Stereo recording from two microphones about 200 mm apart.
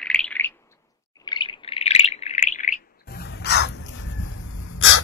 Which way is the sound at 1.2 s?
25° left (ahead or behind).